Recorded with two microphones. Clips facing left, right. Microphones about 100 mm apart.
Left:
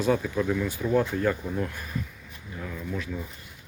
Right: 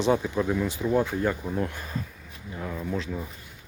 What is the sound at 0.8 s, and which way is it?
Speech, 10° right (ahead or behind).